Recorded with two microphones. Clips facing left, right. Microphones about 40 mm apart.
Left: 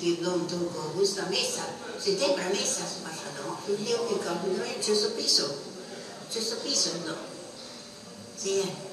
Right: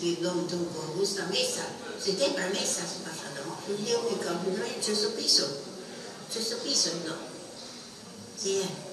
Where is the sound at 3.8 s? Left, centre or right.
Left.